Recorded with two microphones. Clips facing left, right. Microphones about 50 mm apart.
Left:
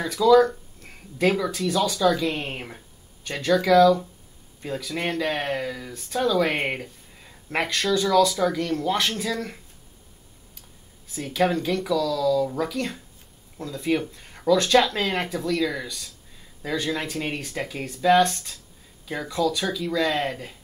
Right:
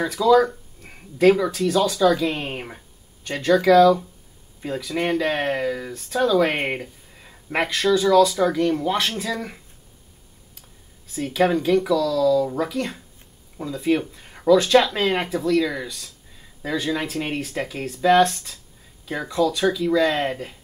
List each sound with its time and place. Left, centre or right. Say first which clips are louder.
0.0 s speech: even; centre
2.3 s speech: right 2 dB; right
5.9 s speech: right 3 dB; centre
11.2 s speech: right 3 dB; right
11.5 s speech: right 5 dB; centre
19.0 s speech: right 3 dB; centre
20.0 s speech: even; right